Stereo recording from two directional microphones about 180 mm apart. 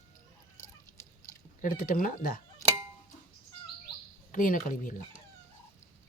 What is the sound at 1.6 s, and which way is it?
Speech, 55° left (ahead or behind).